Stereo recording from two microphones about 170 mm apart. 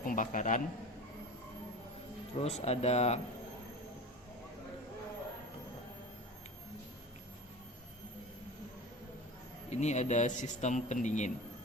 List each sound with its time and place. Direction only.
0.0 s a man's voice: 50° left (ahead or behind)
2.4 s speech: 40° left (ahead or behind)
9.6 s a man's voice: 40° left (ahead or behind)